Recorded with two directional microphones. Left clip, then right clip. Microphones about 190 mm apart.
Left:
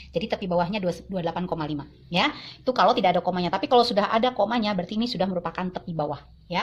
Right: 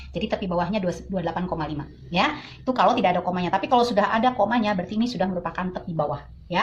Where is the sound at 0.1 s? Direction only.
55° left (ahead or behind).